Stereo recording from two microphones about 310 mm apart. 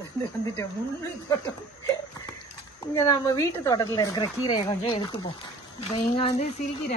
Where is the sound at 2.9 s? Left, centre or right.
Centre.